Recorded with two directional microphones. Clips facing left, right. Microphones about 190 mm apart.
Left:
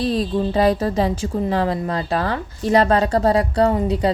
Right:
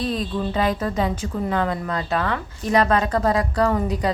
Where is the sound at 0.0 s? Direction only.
35° left (ahead or behind).